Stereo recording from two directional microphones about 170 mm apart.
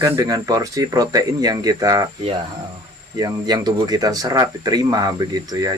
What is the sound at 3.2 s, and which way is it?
Speech, 20° right (ahead or behind).